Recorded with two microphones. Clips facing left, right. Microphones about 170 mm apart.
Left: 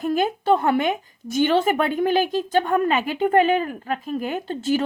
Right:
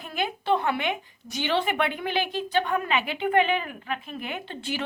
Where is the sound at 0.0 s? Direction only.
40° left (ahead or behind).